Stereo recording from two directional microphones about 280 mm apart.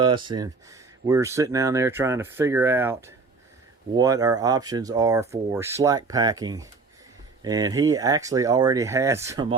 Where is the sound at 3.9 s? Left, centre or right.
Centre.